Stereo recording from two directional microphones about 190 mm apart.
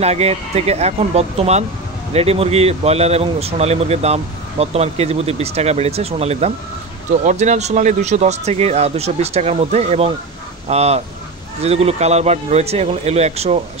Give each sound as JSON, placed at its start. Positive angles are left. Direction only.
{"t": 0.0, "sound": "speech", "side_deg": -35}